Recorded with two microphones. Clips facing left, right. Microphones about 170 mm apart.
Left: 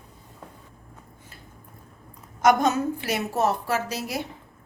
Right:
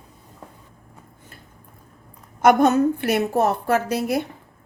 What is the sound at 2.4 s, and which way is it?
A woman's voice, 55° right (ahead or behind).